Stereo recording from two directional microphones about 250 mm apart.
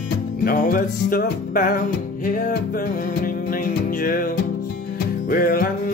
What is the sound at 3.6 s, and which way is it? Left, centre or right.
Music, left.